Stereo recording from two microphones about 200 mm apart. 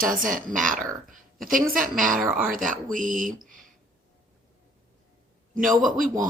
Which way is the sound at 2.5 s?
40° right (ahead or behind).